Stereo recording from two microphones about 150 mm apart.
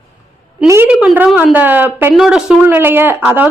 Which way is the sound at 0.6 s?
20° right (ahead or behind).